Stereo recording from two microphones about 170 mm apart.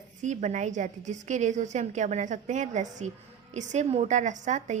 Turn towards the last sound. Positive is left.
turn(degrees=-45)  # may be behind; listen again after turning